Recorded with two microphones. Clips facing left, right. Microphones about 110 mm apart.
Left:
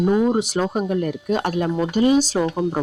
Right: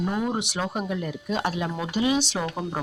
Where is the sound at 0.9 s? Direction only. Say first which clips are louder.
Left 7 dB; 55° left (ahead or behind).